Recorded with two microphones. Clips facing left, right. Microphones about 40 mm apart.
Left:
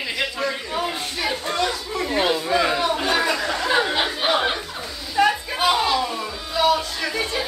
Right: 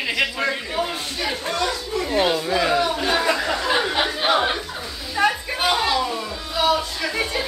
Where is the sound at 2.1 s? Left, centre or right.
Centre.